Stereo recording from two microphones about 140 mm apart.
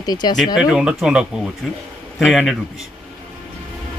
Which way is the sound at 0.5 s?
5° right (ahead or behind).